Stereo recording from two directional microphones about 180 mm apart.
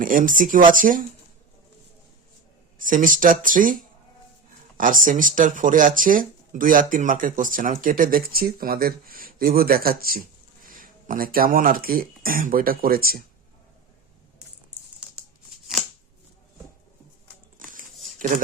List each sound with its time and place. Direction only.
0.0 s speech: 50° right (ahead or behind)
2.7 s speech: 50° right (ahead or behind)
4.8 s speech: 50° right (ahead or behind)
18.2 s speech: 45° right (ahead or behind)